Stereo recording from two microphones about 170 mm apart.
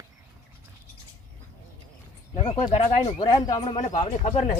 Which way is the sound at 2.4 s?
30° left (ahead or behind).